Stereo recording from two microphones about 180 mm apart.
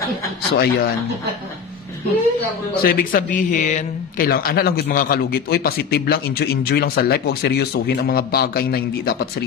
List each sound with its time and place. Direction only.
0.5 s a man's voice: 65° left (ahead or behind)
2.8 s a man's voice: 50° left (ahead or behind)